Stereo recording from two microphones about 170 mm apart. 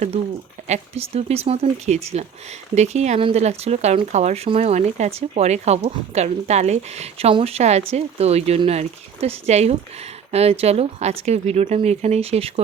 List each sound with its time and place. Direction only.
0.7 s speech: 35° right (ahead or behind)